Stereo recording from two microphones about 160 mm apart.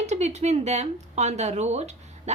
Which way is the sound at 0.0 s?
45° right (ahead or behind).